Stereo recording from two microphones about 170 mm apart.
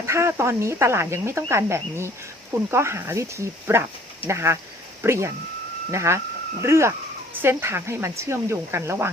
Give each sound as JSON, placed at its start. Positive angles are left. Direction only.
{"t": 0.0, "sound": "speech", "side_deg": -15}